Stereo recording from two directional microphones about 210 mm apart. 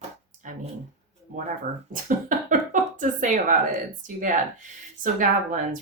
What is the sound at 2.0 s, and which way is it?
Speech, 35° right (ahead or behind).